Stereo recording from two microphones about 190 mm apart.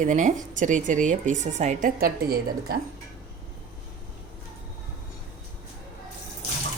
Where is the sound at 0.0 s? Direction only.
40° right (ahead or behind).